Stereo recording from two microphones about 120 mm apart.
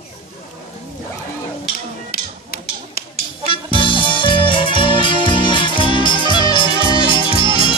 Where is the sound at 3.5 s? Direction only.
45° left (ahead or behind).